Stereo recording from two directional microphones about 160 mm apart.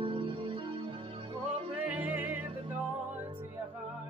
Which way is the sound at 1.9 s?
10° right (ahead or behind).